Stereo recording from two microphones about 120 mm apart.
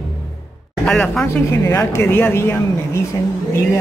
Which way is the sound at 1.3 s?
25° left (ahead or behind).